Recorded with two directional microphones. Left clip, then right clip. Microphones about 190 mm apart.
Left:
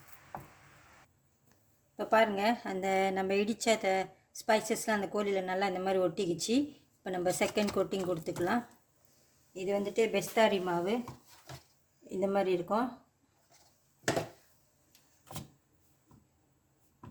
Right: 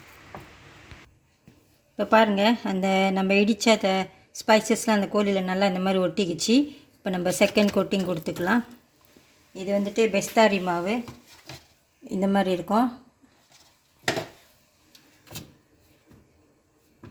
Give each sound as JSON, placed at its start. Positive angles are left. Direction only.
{"t": 2.0, "sound": "a woman's voice", "side_deg": -40}
{"t": 9.6, "sound": "a woman's voice", "side_deg": -30}
{"t": 12.0, "sound": "speech", "side_deg": -45}